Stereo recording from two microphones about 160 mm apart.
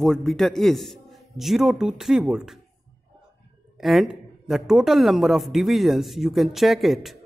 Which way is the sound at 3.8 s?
Centre (ahead or behind).